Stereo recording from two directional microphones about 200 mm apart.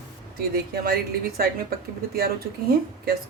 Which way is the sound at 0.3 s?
50° right (ahead or behind).